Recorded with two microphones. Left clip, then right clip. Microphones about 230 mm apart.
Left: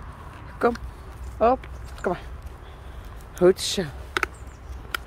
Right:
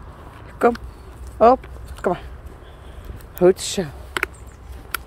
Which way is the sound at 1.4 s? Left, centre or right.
Right.